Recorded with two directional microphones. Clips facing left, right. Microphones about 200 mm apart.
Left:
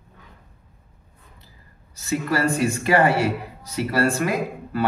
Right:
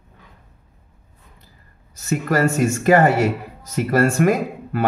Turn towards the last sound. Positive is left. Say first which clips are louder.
# right 2 dB
turn(degrees=-50)  # may be behind; listen again after turning